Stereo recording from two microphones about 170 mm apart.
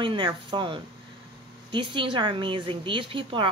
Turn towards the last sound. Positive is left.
turn(degrees=-30)  # may be behind; listen again after turning